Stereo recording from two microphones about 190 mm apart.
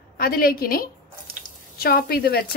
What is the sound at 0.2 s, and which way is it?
A woman's voice, 50° left (ahead or behind).